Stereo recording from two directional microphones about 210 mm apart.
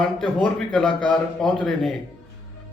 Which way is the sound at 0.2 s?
5° left (ahead or behind).